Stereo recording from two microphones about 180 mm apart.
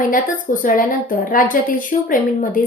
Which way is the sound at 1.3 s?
50° left (ahead or behind).